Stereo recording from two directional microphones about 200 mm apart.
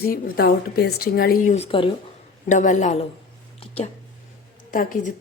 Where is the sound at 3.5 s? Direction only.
30° left (ahead or behind).